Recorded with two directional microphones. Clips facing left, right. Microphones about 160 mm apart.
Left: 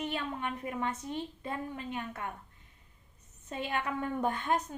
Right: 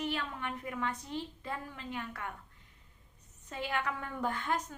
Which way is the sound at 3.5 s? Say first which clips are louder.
Left 2 dB; 25° left (ahead or behind).